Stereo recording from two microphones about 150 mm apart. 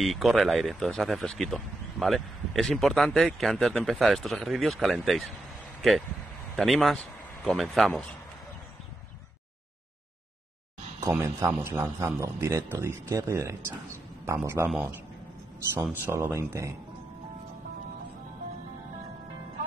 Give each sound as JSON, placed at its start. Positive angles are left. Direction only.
{"t": 0.0, "sound": "speech", "side_deg": 0}
{"t": 11.0, "sound": "speech", "side_deg": -15}
{"t": 16.0, "sound": "speech", "side_deg": -20}